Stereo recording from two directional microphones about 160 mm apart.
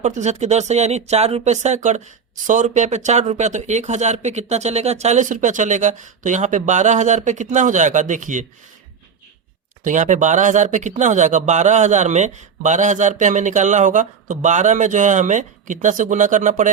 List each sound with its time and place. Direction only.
0.0 s speech: 45° right (ahead or behind)
9.8 s speech: 50° right (ahead or behind)